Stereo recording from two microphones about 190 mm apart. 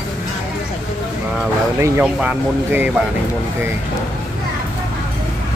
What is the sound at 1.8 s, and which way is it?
Speech, 5° right (ahead or behind).